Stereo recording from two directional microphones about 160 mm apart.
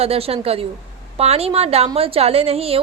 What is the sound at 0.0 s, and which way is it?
A woman's voice, 40° right (ahead or behind).